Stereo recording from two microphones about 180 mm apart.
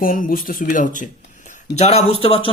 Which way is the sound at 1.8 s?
35° left (ahead or behind).